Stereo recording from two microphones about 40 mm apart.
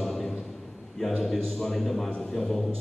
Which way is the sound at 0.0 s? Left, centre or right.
Centre.